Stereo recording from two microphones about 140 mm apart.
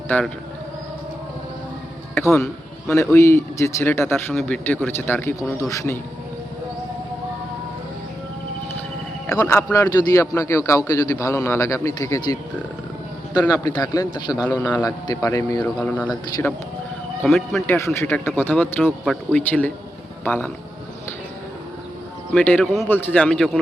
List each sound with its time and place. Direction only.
0.1 s a man's voice: 10° left (ahead or behind)
2.1 s music: 20° left (ahead or behind)
2.8 s a man's voice: 20° left (ahead or behind)
9.3 s a man's voice: 20° left (ahead or behind)
13.5 s a man's voice: 30° left (ahead or behind)
14.3 s a man's voice: 10° right (ahead or behind)
14.7 s a man's voice: 30° left (ahead or behind)
17.2 s speech: centre (ahead or behind)
17.7 s a man's voice: 20° left (ahead or behind)
18.8 s speech: centre (ahead or behind)
19.3 s a man's voice: 10° left (ahead or behind)
22.4 s a man's voice: 10° left (ahead or behind)